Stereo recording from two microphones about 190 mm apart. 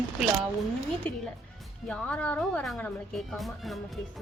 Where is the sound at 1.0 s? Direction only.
10° left (ahead or behind).